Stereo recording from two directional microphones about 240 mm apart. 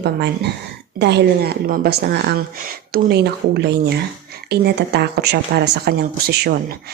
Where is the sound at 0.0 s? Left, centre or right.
Right.